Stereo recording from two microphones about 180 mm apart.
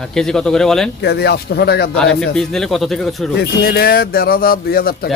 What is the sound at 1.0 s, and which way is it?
Speech, 65° left (ahead or behind).